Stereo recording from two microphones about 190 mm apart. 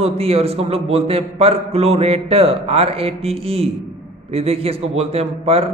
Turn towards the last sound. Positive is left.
turn(degrees=-30)  # may be behind; listen again after turning